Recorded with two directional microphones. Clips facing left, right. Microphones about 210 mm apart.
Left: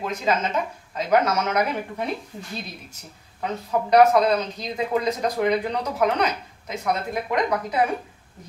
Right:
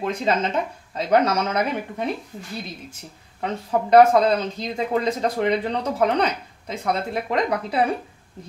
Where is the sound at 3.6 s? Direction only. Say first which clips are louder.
Right 2 dB; 25° right (ahead or behind).